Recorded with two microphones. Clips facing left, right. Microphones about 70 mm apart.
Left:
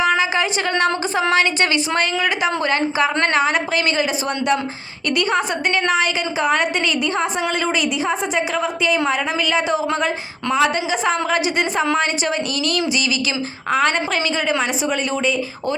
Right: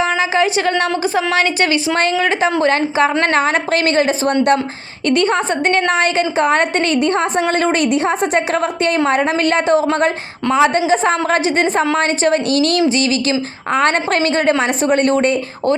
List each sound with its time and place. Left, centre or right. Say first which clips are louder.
0.2 s a sound: right 4 dB; right
1.1 s a woman's voice: right 2 dB; right
13.8 s a woman's voice: right 7 dB; right